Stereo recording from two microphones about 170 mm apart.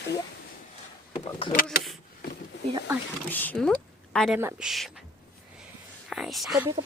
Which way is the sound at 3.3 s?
10° left (ahead or behind).